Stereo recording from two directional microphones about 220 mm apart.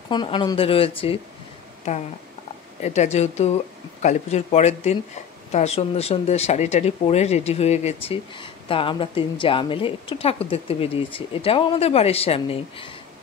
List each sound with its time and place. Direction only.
0.1 s speech: 20° left (ahead or behind)
2.8 s a woman's voice: 30° left (ahead or behind)